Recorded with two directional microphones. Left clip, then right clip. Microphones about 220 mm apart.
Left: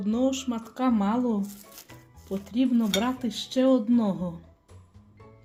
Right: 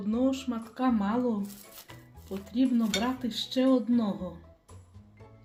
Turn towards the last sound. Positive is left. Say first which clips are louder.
# left 4 dB
turn(degrees=40)  # may be behind; listen again after turning